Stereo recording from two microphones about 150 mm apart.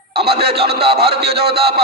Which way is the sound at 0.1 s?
90° right.